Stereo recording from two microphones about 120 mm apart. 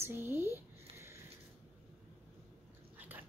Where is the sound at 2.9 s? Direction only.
15° right (ahead or behind).